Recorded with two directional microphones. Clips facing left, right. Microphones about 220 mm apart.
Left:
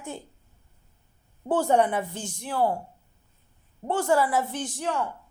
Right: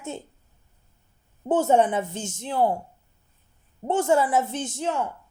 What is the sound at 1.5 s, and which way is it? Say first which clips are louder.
A woman's voice: right 2 dB; 20° right (ahead or behind).